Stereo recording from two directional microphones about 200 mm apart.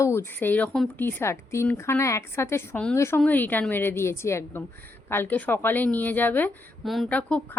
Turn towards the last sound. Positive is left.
turn(degrees=5)  # may be behind; listen again after turning